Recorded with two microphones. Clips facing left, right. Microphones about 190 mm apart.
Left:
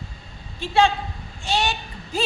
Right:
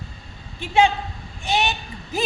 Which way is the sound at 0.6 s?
15° right (ahead or behind).